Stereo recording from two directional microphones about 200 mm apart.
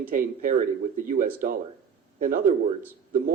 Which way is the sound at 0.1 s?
45° right (ahead or behind).